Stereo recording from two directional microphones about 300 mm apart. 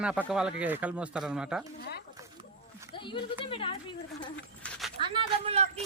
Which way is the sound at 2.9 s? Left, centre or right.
Centre.